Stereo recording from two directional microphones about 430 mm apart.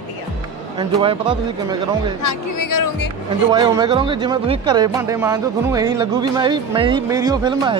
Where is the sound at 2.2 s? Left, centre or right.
Left.